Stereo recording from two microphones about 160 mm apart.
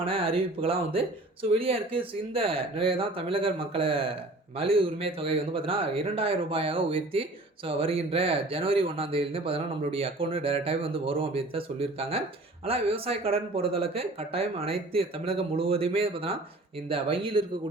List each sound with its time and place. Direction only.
0.0 s speech: 35° right (ahead or behind)